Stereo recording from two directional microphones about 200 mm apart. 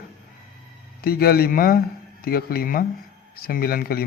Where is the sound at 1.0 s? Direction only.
50° left (ahead or behind).